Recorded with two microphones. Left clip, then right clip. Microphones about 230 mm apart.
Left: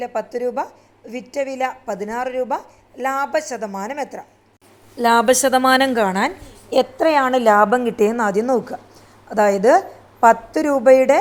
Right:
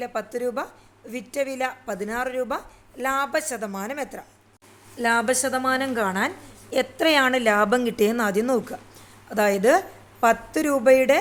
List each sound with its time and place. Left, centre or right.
0.0 s a woman's voice: centre
4.9 s a woman's voice: left
7.3 s a woman's voice: centre